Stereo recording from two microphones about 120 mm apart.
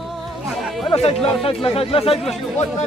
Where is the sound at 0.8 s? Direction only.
55° left (ahead or behind).